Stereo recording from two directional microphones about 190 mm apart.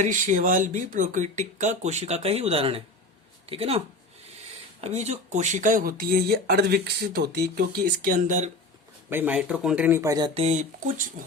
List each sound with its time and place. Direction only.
0.0 s speech: 40° right (ahead or behind)
9.0 s speech: 10° right (ahead or behind); by 11.1 s 40° right (ahead or behind)